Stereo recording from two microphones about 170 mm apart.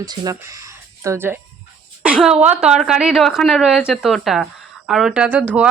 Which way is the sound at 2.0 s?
5° right (ahead or behind).